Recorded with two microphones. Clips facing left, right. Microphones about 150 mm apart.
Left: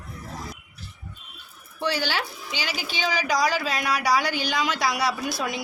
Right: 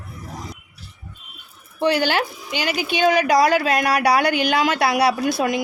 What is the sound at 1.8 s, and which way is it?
Speech, 55° right (ahead or behind).